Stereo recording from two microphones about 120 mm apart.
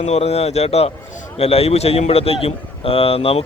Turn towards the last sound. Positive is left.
turn(degrees=50)  # may be behind; listen again after turning